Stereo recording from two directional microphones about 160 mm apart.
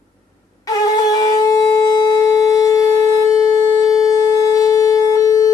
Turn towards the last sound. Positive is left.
turn(degrees=20)  # may be behind; listen again after turning